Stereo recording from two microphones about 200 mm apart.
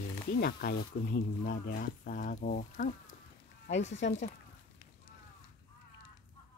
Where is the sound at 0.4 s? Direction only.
50° left (ahead or behind).